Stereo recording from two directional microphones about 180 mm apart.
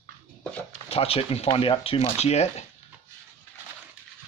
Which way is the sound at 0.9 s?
30° left (ahead or behind).